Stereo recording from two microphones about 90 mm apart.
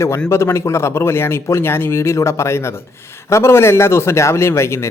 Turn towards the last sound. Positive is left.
turn(degrees=30)  # may be behind; listen again after turning